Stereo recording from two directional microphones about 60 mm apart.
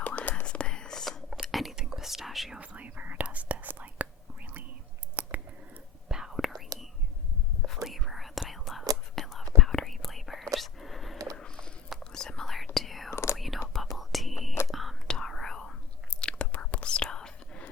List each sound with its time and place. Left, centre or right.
0.0 s whispering: left; by 1.2 s centre
1.3 s whispering: centre
2.6 s whispering: right
5.2 s a sound: right
6.1 s whispering: centre
7.9 s whispering: centre
11.3 s a sound: centre
12.1 s whispering: centre
13.1 s whispering: left
13.3 s whispering: centre
15.0 s whispering: centre
16.5 s whispering: left